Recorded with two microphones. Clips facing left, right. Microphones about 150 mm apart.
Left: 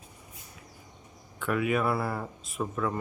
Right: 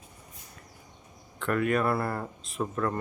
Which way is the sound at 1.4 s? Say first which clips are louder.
Right 1 dB; 5° left (ahead or behind).